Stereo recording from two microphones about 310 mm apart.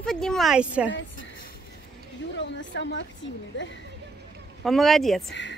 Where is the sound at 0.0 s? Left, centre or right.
Centre.